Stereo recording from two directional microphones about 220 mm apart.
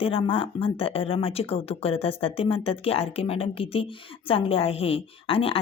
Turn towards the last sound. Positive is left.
turn(degrees=25)  # may be behind; listen again after turning